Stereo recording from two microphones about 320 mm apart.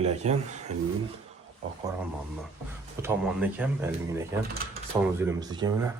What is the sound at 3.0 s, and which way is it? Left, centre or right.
Speech, centre.